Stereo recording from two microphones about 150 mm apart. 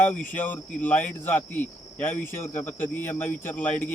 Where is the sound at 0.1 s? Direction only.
10° left (ahead or behind).